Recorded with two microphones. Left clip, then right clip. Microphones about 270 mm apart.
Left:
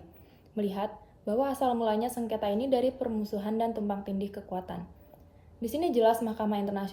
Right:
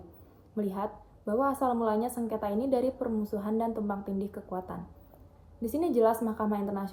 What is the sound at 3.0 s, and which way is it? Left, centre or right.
A woman's voice, left.